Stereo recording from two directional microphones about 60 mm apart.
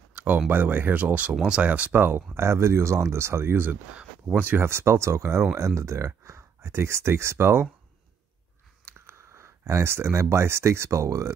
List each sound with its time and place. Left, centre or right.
0.1 s a sound: right
0.5 s speech: right
1.3 s speech: centre; by 7.6 s right
8.8 s speech: right